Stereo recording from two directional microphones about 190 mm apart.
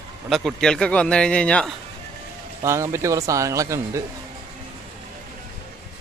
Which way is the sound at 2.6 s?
15° right (ahead or behind).